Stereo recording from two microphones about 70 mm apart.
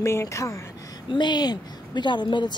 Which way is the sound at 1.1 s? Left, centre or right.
Left.